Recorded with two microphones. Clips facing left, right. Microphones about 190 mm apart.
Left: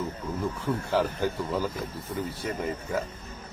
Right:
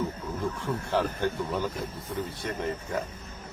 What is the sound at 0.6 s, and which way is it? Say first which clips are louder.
Speech: left 2 dB; 5° left (ahead or behind).